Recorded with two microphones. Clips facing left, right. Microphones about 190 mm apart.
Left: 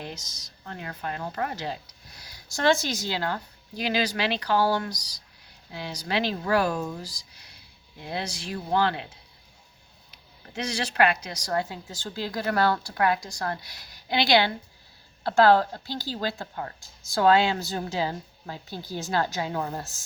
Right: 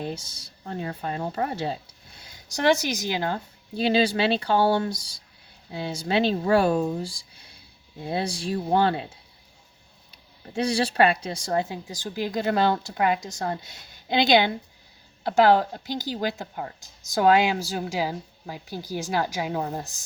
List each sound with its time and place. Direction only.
0.0 s speech: 30° right (ahead or behind)
10.5 s speech: 30° right (ahead or behind); by 20.0 s 15° right (ahead or behind)